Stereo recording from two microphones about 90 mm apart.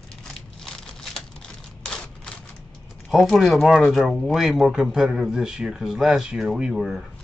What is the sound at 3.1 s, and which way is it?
Speech, centre (ahead or behind).